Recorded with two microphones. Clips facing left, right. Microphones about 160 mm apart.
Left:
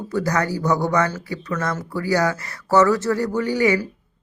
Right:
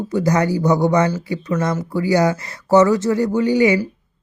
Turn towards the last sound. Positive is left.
turn(degrees=-20)  # may be behind; listen again after turning